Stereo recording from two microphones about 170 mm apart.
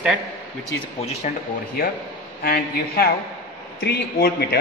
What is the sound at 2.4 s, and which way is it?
A man's voice, 65° left (ahead or behind).